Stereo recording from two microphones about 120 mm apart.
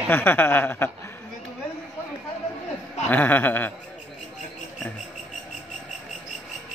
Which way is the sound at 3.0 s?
15° left (ahead or behind).